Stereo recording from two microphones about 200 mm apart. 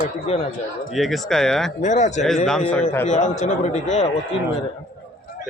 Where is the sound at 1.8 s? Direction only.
35° left (ahead or behind).